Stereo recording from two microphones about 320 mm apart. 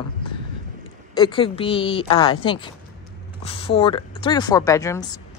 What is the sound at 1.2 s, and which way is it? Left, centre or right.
A woman's voice, centre.